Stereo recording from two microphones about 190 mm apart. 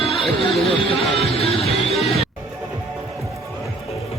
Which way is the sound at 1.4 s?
30° left (ahead or behind).